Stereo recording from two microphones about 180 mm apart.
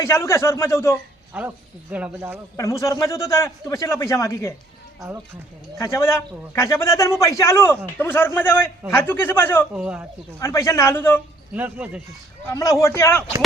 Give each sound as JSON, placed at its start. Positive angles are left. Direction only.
{"t": 0.0, "sound": "a man's voice", "side_deg": 15}
{"t": 1.9, "sound": "speech", "side_deg": -10}
{"t": 2.6, "sound": "a man's voice", "side_deg": 15}
{"t": 4.9, "sound": "speech", "side_deg": -10}
{"t": 5.8, "sound": "a man's voice", "side_deg": 15}
{"t": 9.7, "sound": "speech", "side_deg": -5}
{"t": 10.4, "sound": "a man's voice", "side_deg": 15}
{"t": 11.5, "sound": "speech", "side_deg": -10}
{"t": 12.5, "sound": "a man's voice", "side_deg": 15}